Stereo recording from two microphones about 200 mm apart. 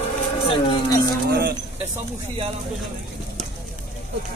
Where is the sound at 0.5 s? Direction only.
25° left (ahead or behind).